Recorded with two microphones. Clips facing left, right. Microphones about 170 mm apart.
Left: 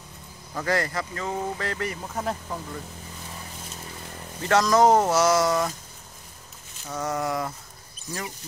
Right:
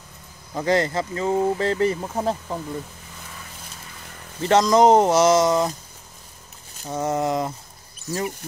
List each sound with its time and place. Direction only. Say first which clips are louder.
0.6 s speech: right 5 dB; 25° right (ahead or behind)
4.4 s speech: right 3 dB; 20° right (ahead or behind)
6.9 s speech: right 5 dB; 25° right (ahead or behind)